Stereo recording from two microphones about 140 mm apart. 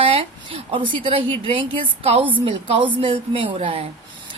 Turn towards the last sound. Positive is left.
turn(degrees=-45)  # may be behind; listen again after turning